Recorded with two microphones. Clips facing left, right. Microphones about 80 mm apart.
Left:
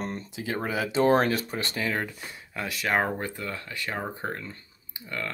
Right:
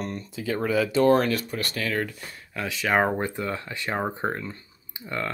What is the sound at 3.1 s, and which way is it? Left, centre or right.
Speech, right.